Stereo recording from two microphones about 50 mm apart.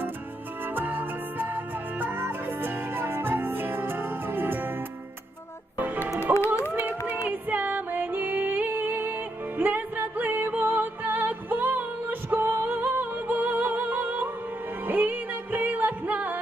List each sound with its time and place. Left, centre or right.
0.6 s music: right
5.7 s music: right
6.3 s music: right
7.3 s music: right